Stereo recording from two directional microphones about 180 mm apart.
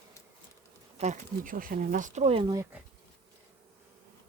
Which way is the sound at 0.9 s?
40° right (ahead or behind).